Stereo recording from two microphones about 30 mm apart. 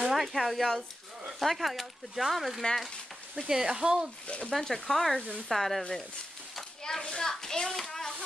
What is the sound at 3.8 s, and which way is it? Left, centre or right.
Speech, right.